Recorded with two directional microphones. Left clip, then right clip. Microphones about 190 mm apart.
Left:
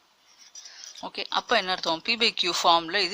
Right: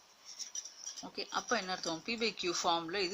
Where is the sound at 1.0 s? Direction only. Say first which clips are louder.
Left 10 dB; 35° left (ahead or behind).